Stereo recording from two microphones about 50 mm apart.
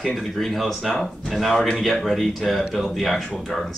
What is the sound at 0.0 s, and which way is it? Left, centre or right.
Speech, centre.